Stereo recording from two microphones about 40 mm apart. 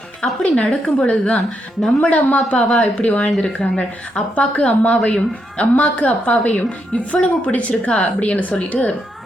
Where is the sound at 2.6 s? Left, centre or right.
Left.